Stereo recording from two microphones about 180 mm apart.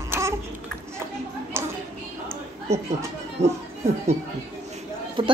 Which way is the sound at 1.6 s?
15° right (ahead or behind).